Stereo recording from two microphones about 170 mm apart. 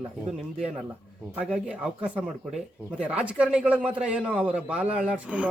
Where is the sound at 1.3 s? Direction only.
10° right (ahead or behind).